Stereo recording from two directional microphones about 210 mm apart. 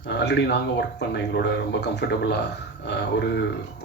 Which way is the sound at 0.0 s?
55° left (ahead or behind).